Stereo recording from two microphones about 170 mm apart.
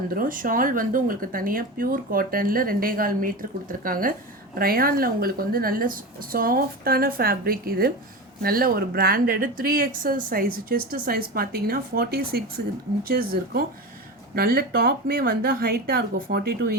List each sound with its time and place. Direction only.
0.1 s speech: 55° right (ahead or behind)